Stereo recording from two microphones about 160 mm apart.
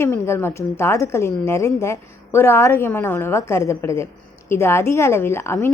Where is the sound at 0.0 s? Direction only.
15° left (ahead or behind).